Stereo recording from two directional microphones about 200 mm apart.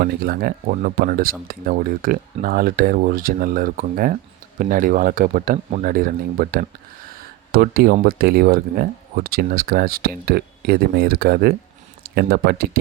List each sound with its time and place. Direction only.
0.0 s speech: 50° right (ahead or behind)